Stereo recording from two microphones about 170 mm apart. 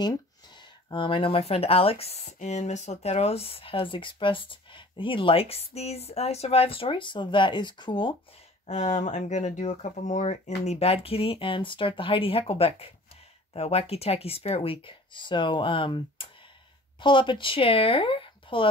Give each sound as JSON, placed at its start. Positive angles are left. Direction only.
{"t": 0.8, "sound": "speech", "side_deg": 30}
{"t": 8.6, "sound": "speech", "side_deg": 45}